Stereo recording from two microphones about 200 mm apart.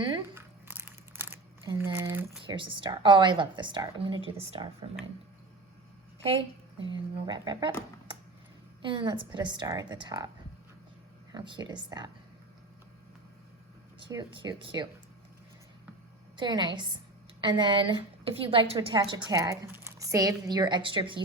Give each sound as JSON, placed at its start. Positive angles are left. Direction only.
{"t": 0.3, "sound": "crumpling", "side_deg": -10}
{"t": 1.8, "sound": "a sound", "side_deg": -15}
{"t": 2.5, "sound": "a woman's voice", "side_deg": -25}
{"t": 6.8, "sound": "a woman's voice", "side_deg": -20}
{"t": 8.8, "sound": "a woman's voice", "side_deg": -25}
{"t": 11.3, "sound": "a woman's voice", "side_deg": -20}
{"t": 14.1, "sound": "a woman's voice", "side_deg": -20}
{"t": 16.4, "sound": "a woman's voice", "side_deg": -20}